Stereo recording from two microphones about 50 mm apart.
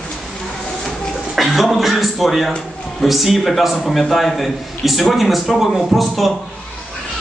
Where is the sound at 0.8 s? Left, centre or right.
Centre.